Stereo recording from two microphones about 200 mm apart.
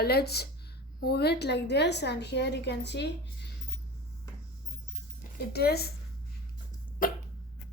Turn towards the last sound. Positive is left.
turn(degrees=45)  # may be behind; listen again after turning